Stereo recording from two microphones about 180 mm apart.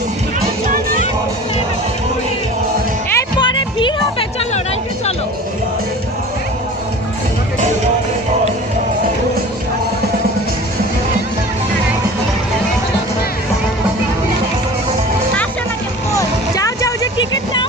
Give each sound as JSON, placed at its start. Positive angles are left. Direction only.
{"t": 3.2, "sound": "music", "side_deg": 25}
{"t": 16.1, "sound": "vehicle", "side_deg": 20}